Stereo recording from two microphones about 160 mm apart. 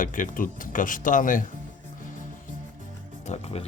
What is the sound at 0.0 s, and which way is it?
Speech, 55° left (ahead or behind).